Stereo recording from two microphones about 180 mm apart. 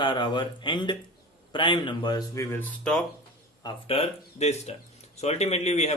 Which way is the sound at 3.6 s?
30° left (ahead or behind).